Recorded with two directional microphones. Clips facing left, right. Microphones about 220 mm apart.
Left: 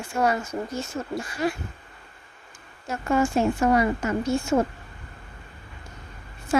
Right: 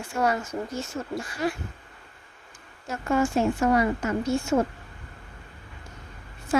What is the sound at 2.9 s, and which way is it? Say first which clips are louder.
A woman's voice: left 1 dB; 20° left (ahead or behind).